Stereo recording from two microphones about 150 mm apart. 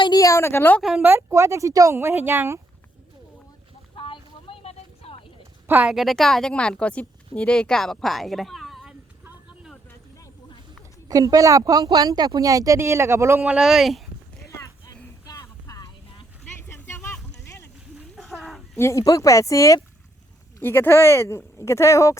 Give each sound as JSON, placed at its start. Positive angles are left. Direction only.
{"t": 0.0, "sound": "a woman's voice", "side_deg": 25}
{"t": 0.8, "sound": "speech", "side_deg": -5}
{"t": 1.0, "sound": "speech", "side_deg": -15}
{"t": 3.9, "sound": "a sound", "side_deg": 35}
{"t": 5.6, "sound": "a woman's voice", "side_deg": -15}
{"t": 5.9, "sound": "speech", "side_deg": 0}
{"t": 9.2, "sound": "a sound", "side_deg": -5}
{"t": 11.1, "sound": "speech", "side_deg": -25}
{"t": 13.4, "sound": "speech", "side_deg": -5}
{"t": 15.3, "sound": "vehicle", "side_deg": 25}
{"t": 16.6, "sound": "a sound", "side_deg": 15}
{"t": 18.2, "sound": "a sound", "side_deg": 0}
{"t": 18.8, "sound": "speech", "side_deg": 20}